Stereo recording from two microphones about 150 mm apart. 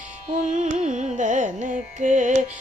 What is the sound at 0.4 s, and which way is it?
Carnatic music, 50° right (ahead or behind).